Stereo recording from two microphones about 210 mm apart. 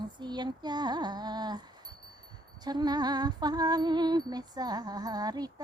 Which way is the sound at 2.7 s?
20° right (ahead or behind).